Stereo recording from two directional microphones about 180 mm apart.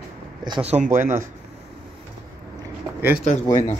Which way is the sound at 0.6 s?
45° right (ahead or behind).